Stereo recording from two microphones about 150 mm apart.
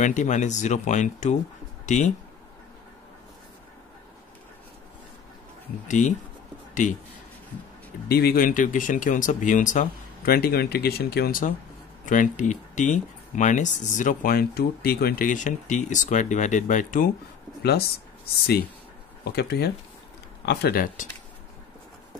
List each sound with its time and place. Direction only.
0.0 s speech: 55° left (ahead or behind)
5.9 s speech: 55° left (ahead or behind)
6.7 s a sound: 55° left (ahead or behind)
8.1 s speech: 90° left; by 11.5 s 70° left (ahead or behind)
12.1 s speech: 55° left (ahead or behind)
17.6 s speech: 90° left
19.2 s speech: 90° left; by 21.1 s 65° left (ahead or behind)